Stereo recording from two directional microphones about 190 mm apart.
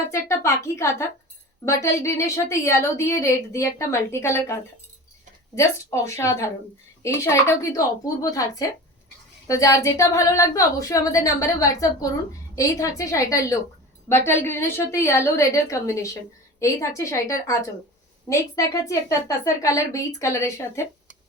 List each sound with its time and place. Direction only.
0.1 s a woman's voice: 15° left (ahead or behind)